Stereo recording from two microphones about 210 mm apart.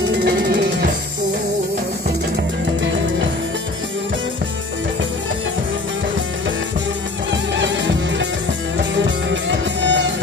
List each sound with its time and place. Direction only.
7.5 s music: 60° right (ahead or behind)